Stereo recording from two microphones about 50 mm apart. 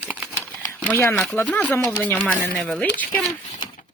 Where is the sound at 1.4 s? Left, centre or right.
Left.